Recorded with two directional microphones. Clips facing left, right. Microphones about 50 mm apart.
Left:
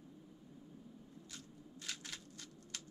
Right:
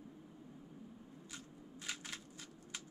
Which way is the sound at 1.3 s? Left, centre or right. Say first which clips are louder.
Right 3 dB; centre.